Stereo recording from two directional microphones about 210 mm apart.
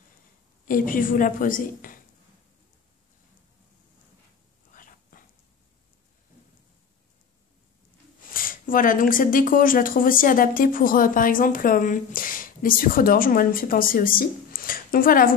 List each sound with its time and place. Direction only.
0.7 s speech: 40° left (ahead or behind)
4.7 s dog: 40° left (ahead or behind)
8.3 s a woman's voice: 40° left (ahead or behind)